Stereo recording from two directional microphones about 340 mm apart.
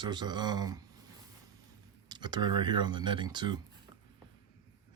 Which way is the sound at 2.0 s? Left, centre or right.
Centre.